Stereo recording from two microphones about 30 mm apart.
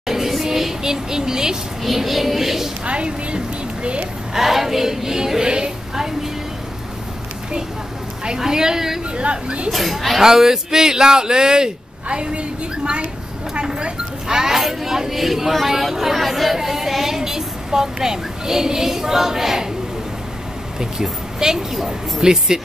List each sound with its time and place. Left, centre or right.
0.0 s a sound: centre
1.8 s a woman's voice: centre
2.8 s speech: right
4.3 s a woman's voice: centre; by 5.7 s right
5.9 s vehicle: centre
8.4 s a woman's voice: right
9.1 s speech: right
9.7 s speech: centre
10.2 s speech: centre; by 13.1 s right
14.2 s a woman's voice: centre
20.8 s speech: centre